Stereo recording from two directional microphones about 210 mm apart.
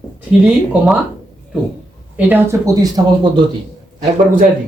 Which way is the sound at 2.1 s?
10° right (ahead or behind).